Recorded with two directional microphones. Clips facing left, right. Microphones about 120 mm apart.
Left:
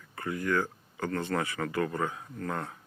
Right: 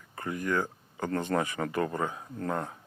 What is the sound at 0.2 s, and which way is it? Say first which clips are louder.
Speech: even; 20° right (ahead or behind).